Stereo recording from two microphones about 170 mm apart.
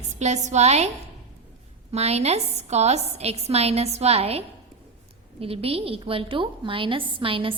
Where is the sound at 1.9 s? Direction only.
40° right (ahead or behind).